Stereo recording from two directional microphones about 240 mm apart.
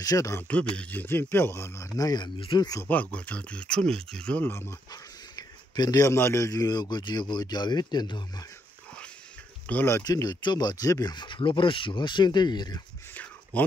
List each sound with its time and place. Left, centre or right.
0.0 s speech: centre
9.7 s speech: centre